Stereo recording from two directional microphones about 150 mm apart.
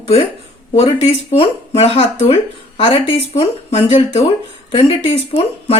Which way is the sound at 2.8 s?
35° left (ahead or behind).